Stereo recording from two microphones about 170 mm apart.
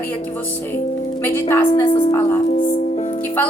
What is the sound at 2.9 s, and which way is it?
Music, 40° left (ahead or behind).